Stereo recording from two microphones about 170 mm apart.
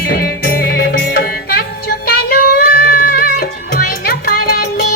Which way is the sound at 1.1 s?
65° left (ahead or behind).